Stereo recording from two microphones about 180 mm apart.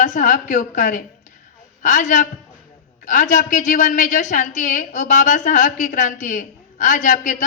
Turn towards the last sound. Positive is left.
turn(degrees=45)  # may be behind; listen again after turning